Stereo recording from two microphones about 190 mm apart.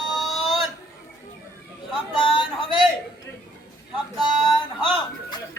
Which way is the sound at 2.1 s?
25° left (ahead or behind).